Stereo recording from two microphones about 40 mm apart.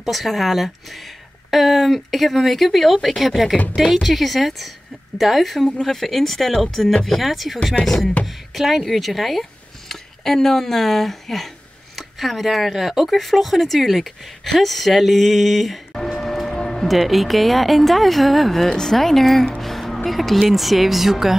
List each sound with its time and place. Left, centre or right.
0.0 s speech: centre
8.5 s speech: centre
15.9 s a sound: centre
16.5 s music: centre
16.8 s speech: centre
19.6 s music: centre
20.1 s speech: centre